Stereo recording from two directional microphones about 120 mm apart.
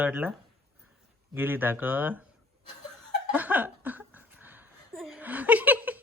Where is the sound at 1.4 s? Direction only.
15° right (ahead or behind).